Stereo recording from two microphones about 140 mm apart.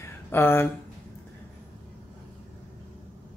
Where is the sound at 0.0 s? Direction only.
15° left (ahead or behind).